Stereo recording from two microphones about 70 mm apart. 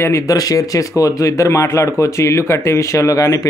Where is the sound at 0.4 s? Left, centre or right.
Left.